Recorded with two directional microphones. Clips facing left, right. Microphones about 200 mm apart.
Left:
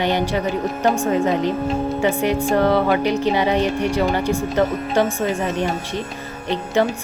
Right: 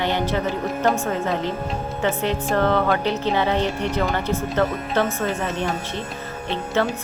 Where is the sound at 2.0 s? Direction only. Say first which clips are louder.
Left 1 dB; 10° left (ahead or behind).